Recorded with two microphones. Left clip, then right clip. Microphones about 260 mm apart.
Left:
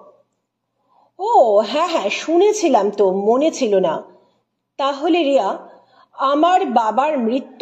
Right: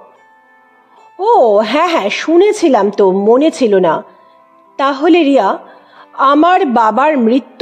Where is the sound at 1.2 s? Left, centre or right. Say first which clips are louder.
Right 4 dB; right.